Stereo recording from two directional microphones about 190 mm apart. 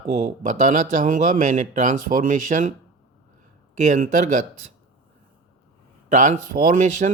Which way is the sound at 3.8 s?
40° right (ahead or behind).